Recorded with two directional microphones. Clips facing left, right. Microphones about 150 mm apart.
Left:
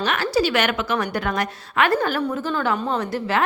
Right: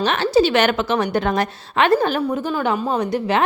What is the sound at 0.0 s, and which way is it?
A woman's voice, 25° right (ahead or behind).